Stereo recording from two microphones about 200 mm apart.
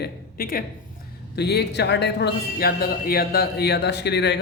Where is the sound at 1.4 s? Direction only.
55° left (ahead or behind).